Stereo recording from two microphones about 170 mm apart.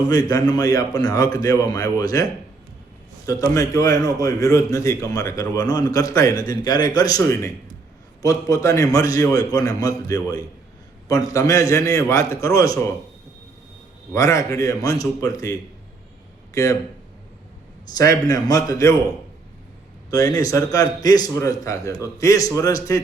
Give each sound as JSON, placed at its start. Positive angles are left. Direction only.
{"t": 0.1, "sound": "a man's voice", "side_deg": 20}
{"t": 3.2, "sound": "a man's voice", "side_deg": 20}
{"t": 14.1, "sound": "a man's voice", "side_deg": 15}
{"t": 16.6, "sound": "a man's voice", "side_deg": 20}
{"t": 17.9, "sound": "a man's voice", "side_deg": 20}
{"t": 20.1, "sound": "a man's voice", "side_deg": 20}